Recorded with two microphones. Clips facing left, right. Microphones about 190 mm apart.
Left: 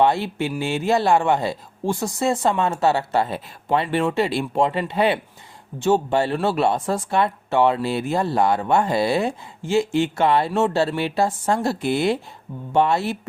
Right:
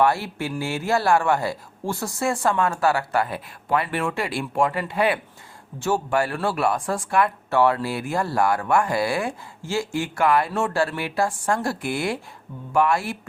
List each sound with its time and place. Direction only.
0.0 s speech: 20° left (ahead or behind)